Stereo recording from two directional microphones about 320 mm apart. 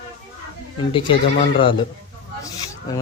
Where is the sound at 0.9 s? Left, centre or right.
Centre.